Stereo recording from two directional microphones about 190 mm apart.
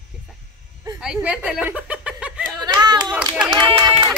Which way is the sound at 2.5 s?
20° right (ahead or behind).